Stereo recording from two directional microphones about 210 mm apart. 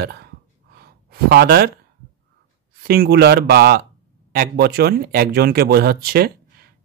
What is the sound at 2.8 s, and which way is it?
Speech, 45° right (ahead or behind).